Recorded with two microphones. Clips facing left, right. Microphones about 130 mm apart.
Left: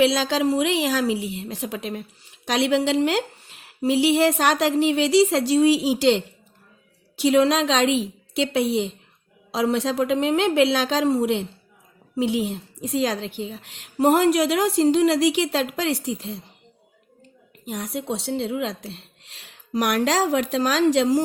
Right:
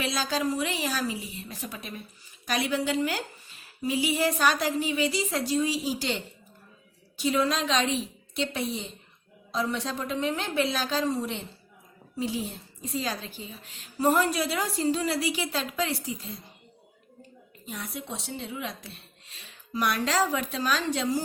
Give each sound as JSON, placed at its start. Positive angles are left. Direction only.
{"t": 0.0, "sound": "a woman's voice", "side_deg": 85}
{"t": 17.7, "sound": "a woman's voice", "side_deg": 80}